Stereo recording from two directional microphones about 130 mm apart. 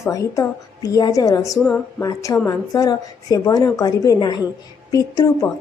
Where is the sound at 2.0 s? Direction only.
25° left (ahead or behind).